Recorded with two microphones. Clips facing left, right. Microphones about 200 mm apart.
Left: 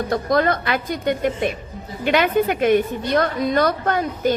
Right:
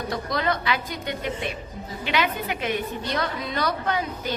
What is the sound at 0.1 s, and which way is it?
A woman's voice, 50° left (ahead or behind).